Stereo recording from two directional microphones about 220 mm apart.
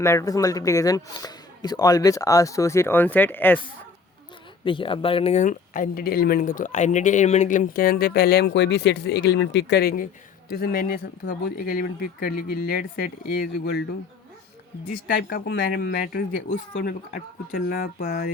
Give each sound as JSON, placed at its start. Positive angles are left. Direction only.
{"t": 0.0, "sound": "a man's voice", "side_deg": 15}
{"t": 4.6, "sound": "speech", "side_deg": 25}
{"t": 15.0, "sound": "speech", "side_deg": 45}